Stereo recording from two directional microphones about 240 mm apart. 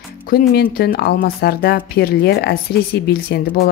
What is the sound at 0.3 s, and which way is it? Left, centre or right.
Speech, left.